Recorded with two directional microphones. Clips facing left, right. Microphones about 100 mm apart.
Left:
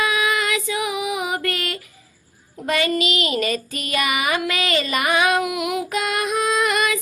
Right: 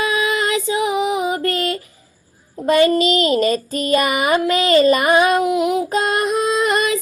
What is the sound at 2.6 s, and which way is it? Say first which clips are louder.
Child singing: right 7 dB; 35° right (ahead or behind).